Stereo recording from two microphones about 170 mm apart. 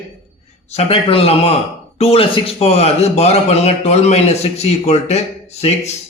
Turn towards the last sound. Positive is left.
turn(degrees=40)  # may be behind; listen again after turning